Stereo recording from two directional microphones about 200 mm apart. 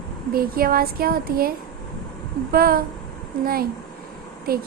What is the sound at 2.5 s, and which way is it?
A woman's voice, 45° right (ahead or behind).